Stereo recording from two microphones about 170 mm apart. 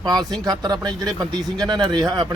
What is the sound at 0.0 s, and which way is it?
Speech, 25° right (ahead or behind).